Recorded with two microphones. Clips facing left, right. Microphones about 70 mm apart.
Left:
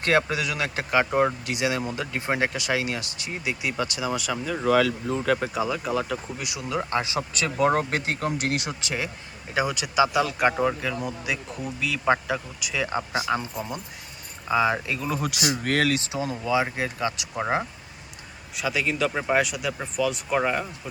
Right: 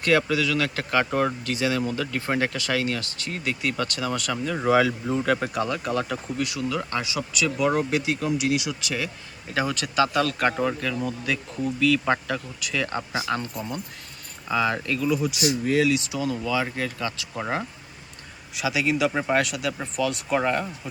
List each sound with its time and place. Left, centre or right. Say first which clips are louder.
0.0 s speech: right 1 dB; left; by 4.6 s centre
4.6 s speech: right 1 dB; centre
5.1 s speech: right 1 dB; centre
6.3 s speech: right 6 dB; centre; by 8.7 s left
8.8 s speech: right 1 dB; left
9.6 s speech: left 1 dB; centre
15.1 s speech: right 1 dB; left
16.0 s speech: right 2 dB; left
18.5 s speech: right 2 dB; centre